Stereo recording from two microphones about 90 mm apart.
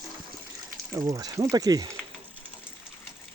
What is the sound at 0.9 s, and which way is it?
Speech, 45° right (ahead or behind).